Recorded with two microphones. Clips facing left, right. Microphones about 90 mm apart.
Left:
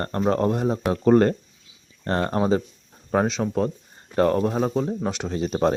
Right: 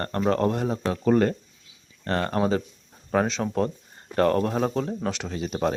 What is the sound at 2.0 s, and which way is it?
Speech, 25° left (ahead or behind).